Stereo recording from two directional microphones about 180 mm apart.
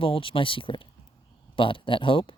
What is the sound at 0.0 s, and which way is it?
Speech, 30° left (ahead or behind).